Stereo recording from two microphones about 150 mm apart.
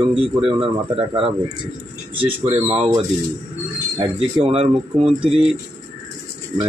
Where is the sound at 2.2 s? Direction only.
45° right (ahead or behind).